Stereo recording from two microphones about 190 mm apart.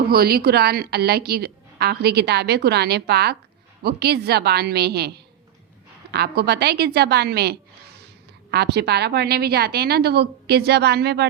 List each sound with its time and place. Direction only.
0.1 s a woman's voice: 55° right (ahead or behind)